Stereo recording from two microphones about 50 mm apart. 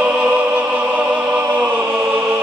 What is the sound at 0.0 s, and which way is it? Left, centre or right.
Music, right.